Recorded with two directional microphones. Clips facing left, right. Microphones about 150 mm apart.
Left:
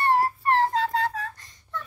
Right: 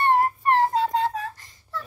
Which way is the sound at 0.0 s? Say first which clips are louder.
Right 2 dB; 20° right (ahead or behind).